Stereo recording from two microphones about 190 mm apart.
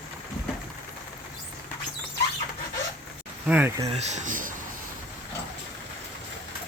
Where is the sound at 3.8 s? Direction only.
35° right (ahead or behind).